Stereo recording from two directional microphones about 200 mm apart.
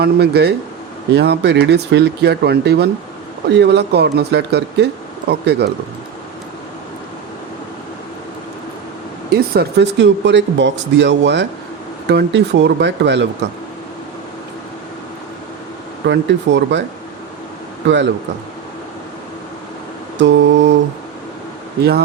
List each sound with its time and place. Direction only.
0.0 s speech: 55° right (ahead or behind)
9.3 s speech: 55° right (ahead or behind)
16.0 s speech: 60° right (ahead or behind)
17.8 s speech: 60° right (ahead or behind)
20.1 s speech: 65° right (ahead or behind)